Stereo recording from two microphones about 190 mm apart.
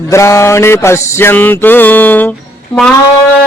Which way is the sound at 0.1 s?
15° left (ahead or behind).